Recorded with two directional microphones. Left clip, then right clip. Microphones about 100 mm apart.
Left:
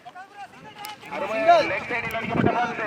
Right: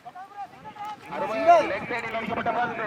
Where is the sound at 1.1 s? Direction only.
30° right (ahead or behind).